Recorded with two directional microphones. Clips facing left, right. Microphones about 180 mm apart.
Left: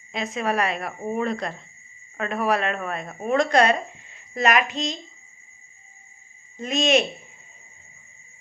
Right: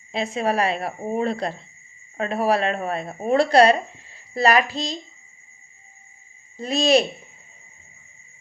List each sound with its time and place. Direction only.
0.1 s speech: 30° right (ahead or behind)
6.6 s speech: 35° right (ahead or behind)